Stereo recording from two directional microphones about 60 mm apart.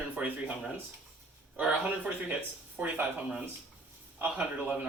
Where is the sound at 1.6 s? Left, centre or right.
Centre.